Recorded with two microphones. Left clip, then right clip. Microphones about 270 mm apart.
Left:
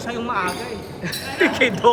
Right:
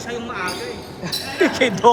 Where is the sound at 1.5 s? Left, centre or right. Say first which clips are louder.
Right 2 dB; right.